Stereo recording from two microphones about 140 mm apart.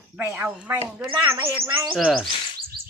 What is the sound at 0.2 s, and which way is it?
Speech, 15° right (ahead or behind).